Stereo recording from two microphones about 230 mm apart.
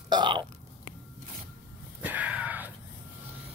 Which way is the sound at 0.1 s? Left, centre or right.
Centre.